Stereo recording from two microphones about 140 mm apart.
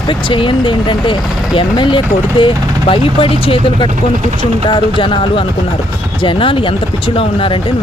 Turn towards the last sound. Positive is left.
turn(degrees=40)  # may be behind; listen again after turning